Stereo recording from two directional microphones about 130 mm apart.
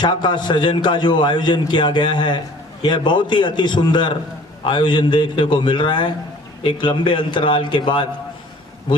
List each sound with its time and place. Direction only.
0.0 s a man's voice: 35° left (ahead or behind)